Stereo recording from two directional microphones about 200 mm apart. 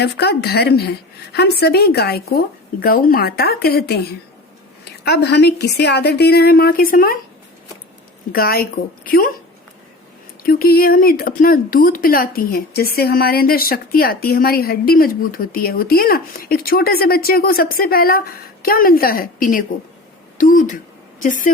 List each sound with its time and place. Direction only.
0.0 s speech: 55° left (ahead or behind)
5.0 s a woman's voice: 55° left (ahead or behind)
8.3 s speech: 50° left (ahead or behind)
10.4 s speech: 50° left (ahead or behind)